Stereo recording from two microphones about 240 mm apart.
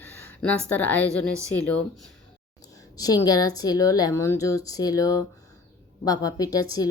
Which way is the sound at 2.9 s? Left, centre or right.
Centre.